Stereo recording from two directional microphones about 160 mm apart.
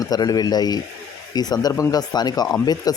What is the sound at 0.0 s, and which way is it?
Speech, 25° left (ahead or behind).